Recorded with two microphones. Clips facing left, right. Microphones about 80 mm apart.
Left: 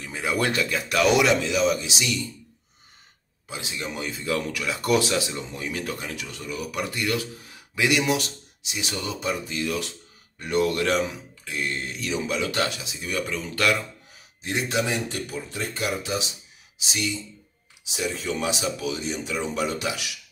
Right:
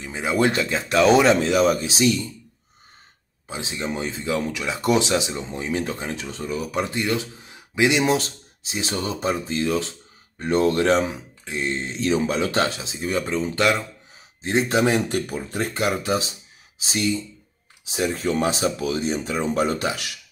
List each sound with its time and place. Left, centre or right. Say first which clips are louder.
0.0 s speech: right 4 dB; right
3.4 s speech: right 4 dB; right
14.8 s speech: right 6 dB; right